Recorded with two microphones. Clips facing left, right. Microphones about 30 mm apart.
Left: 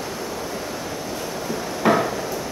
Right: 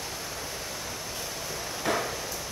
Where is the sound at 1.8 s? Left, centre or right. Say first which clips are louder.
Left 10 dB; left.